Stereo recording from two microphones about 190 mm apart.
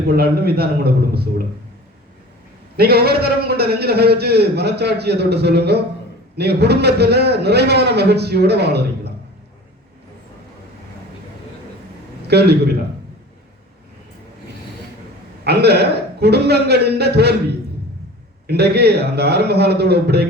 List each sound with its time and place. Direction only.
0.1 s a man's voice: 55° right (ahead or behind)
2.7 s a man's voice: 55° right (ahead or behind)
12.3 s a man's voice: 60° right (ahead or behind)
15.4 s a man's voice: 60° right (ahead or behind)
18.4 s a man's voice: 60° right (ahead or behind)